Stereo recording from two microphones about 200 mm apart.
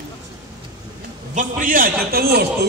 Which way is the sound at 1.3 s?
40° right (ahead or behind).